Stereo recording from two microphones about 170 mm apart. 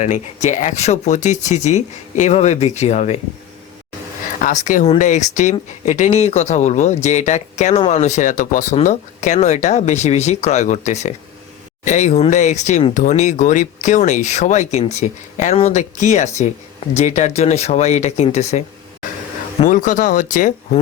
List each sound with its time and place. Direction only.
0.0 s speech: 45° left (ahead or behind)
4.4 s speech: 50° left (ahead or behind)